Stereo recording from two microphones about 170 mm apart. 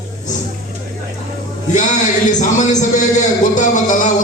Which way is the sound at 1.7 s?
45° left (ahead or behind).